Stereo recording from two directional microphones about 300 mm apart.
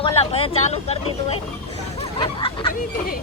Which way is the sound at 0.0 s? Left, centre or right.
Centre.